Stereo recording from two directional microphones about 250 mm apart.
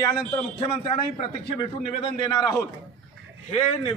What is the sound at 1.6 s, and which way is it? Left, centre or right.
A man's voice, left.